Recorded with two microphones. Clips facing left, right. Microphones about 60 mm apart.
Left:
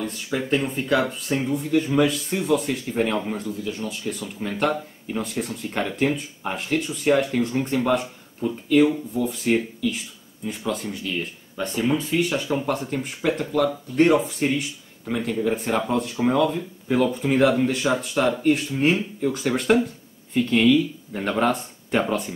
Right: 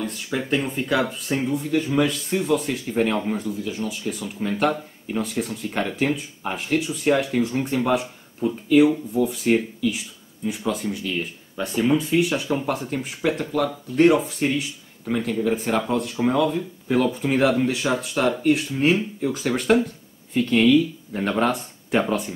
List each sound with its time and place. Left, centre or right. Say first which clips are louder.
0.0 s speech: even; centre